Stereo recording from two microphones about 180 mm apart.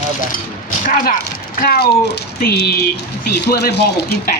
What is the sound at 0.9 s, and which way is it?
Speech, 50° left (ahead or behind).